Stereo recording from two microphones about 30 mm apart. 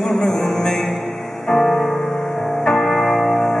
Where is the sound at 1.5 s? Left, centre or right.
Centre.